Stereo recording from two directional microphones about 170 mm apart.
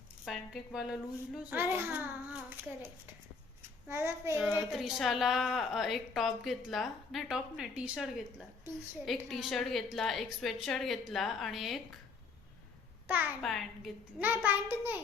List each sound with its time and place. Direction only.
0.3 s a woman's voice: centre (ahead or behind)
4.7 s a woman's voice: centre (ahead or behind)
13.1 s a child's voice: 10° right (ahead or behind)
13.4 s a woman's voice: centre (ahead or behind)
14.2 s a child's voice: 10° right (ahead or behind)